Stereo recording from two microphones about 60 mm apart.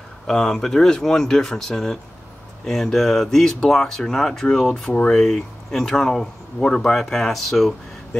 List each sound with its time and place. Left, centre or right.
0.3 s speech: centre
4.9 s speech: left
5.2 s speech: centre